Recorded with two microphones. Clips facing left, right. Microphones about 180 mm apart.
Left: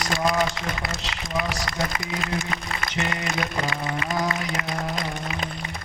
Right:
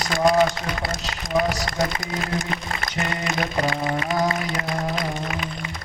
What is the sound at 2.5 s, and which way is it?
Music, 35° right (ahead or behind).